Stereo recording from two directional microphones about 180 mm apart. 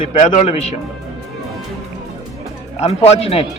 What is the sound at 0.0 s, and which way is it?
Speech, 40° left (ahead or behind).